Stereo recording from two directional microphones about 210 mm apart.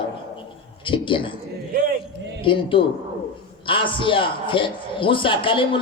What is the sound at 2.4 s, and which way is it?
A man's voice, 25° left (ahead or behind).